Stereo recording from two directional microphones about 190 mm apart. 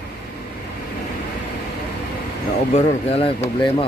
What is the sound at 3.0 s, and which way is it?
Speech, 30° left (ahead or behind).